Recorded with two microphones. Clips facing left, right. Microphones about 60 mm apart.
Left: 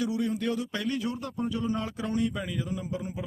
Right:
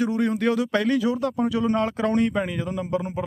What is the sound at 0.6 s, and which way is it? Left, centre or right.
A man's voice, right.